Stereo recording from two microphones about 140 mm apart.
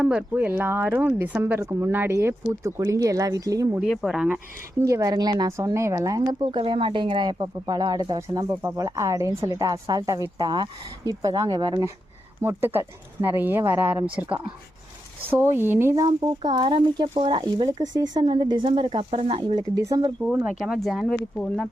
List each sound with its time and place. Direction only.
0.0 s speech: 10° right (ahead or behind); by 3.8 s 25° right (ahead or behind)
3.8 s speech: centre (ahead or behind)
4.8 s speech: 20° right (ahead or behind)
6.4 s speech: 40° right (ahead or behind)
12.4 s speech: 15° right (ahead or behind)
16.0 s speech: 30° right (ahead or behind)
20.2 s speech: 10° right (ahead or behind)